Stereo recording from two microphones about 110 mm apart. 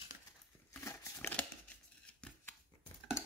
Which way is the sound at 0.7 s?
25° left (ahead or behind).